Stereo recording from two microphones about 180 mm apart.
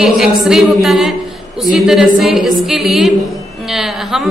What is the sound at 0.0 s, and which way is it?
A woman's voice, centre (ahead or behind).